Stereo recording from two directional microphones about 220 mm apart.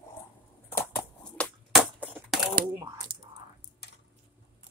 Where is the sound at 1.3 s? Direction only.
5° right (ahead or behind).